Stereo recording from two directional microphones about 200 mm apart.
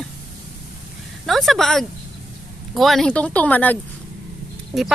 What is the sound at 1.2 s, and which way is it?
A woman's voice, centre (ahead or behind).